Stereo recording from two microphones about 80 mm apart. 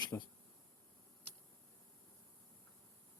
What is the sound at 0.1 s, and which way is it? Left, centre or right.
Speech, left.